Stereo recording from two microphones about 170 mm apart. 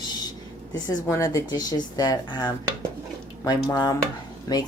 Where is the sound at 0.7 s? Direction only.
20° left (ahead or behind).